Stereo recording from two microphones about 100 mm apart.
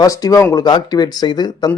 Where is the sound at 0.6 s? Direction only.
45° left (ahead or behind).